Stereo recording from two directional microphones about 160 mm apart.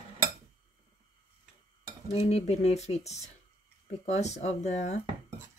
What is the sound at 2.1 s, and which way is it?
Speech, 45° left (ahead or behind).